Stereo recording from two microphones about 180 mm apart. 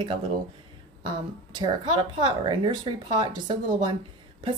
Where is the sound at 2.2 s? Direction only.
25° right (ahead or behind).